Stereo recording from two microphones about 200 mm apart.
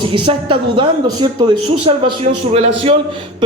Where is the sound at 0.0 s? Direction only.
25° right (ahead or behind).